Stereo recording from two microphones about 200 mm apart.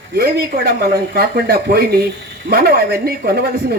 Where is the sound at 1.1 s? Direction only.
50° right (ahead or behind).